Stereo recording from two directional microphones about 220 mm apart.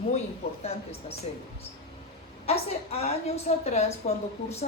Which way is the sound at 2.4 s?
30° left (ahead or behind).